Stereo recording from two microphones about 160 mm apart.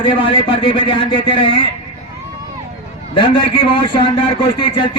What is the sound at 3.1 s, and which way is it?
Speech, 30° left (ahead or behind).